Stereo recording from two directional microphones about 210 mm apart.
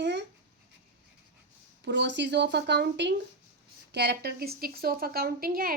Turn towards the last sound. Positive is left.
turn(degrees=-45)  # may be behind; listen again after turning